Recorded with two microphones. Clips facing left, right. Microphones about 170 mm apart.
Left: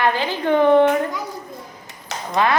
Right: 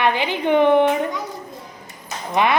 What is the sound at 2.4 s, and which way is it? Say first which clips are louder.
Speech: even; 20° right (ahead or behind).